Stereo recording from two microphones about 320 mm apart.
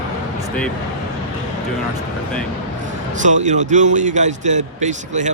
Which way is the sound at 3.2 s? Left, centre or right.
Right.